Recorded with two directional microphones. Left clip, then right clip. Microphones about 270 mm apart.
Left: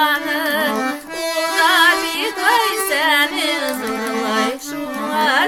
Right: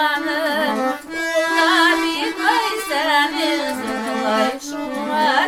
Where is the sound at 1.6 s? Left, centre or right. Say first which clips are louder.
Left 2 dB; centre.